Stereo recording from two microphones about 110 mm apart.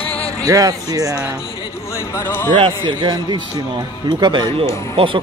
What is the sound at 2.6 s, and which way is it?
A man's voice, 45° right (ahead or behind).